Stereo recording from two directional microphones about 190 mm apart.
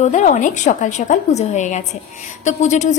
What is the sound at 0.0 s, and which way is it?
A woman's voice, 40° left (ahead or behind).